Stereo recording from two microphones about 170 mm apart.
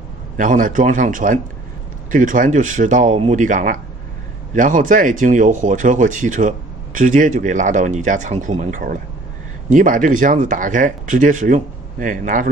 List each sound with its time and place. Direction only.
0.4 s speech: 50° right (ahead or behind)